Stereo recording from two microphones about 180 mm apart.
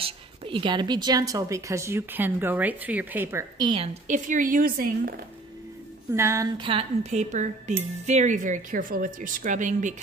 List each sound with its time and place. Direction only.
0.0 s a woman's voice: 30° right (ahead or behind)
4.1 s speech: 45° right (ahead or behind)
6.1 s a woman's voice: 15° right (ahead or behind)
6.6 s speech: 30° right (ahead or behind)